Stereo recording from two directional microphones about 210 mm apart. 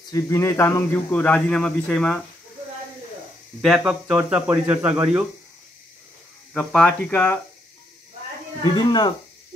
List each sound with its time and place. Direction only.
0.1 s a man's voice: 15° left (ahead or behind)
3.6 s speech: 5° right (ahead or behind)
6.5 s speech: centre (ahead or behind)
8.7 s speech: 20° left (ahead or behind)